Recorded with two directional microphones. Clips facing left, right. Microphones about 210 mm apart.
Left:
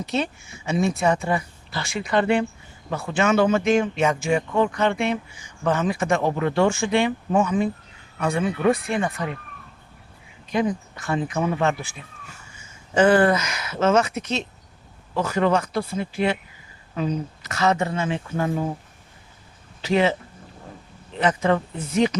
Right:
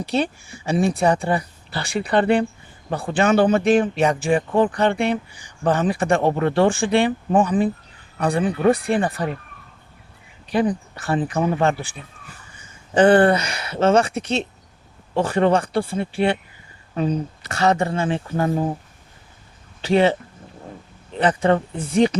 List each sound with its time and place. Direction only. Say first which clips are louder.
0.0 s speech: right 3 dB; 35° right (ahead or behind)
10.5 s speech: right 3 dB; 35° right (ahead or behind)
19.8 s speech: right 3 dB; 35° right (ahead or behind)
21.2 s speech: right 3 dB; 35° right (ahead or behind)